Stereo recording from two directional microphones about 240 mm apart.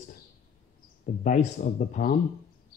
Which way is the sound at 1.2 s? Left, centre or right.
Left.